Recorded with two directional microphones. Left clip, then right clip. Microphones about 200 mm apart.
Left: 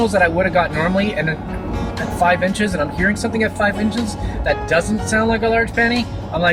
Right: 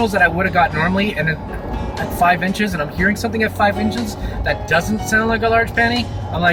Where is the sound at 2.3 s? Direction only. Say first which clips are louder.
Even; 25° right (ahead or behind).